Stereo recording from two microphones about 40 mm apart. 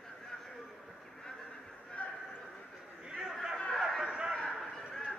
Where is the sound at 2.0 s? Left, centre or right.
Left.